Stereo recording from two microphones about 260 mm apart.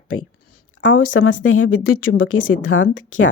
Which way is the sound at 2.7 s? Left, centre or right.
Left.